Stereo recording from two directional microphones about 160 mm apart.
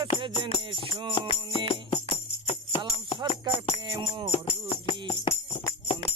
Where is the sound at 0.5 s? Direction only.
30° left (ahead or behind).